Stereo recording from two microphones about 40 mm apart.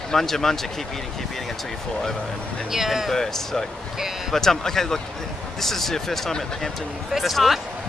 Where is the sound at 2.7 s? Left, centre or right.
Centre.